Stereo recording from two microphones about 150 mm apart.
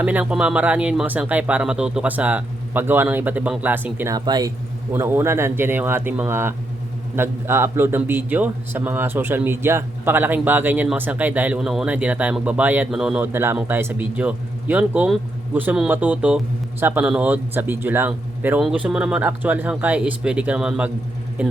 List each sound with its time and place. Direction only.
0.0 s a man's voice: 10° right (ahead or behind)
4.1 s speech: 25° right (ahead or behind)
4.9 s a man's voice: 15° right (ahead or behind)